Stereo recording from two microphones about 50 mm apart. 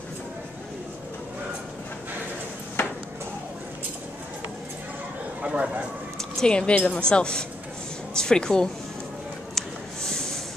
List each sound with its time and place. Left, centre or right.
5.4 s speech: right
6.1 s a woman's voice: centre
9.6 s a sound: centre